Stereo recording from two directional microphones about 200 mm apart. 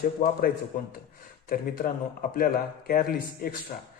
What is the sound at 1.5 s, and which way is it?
A man's voice, 45° left (ahead or behind).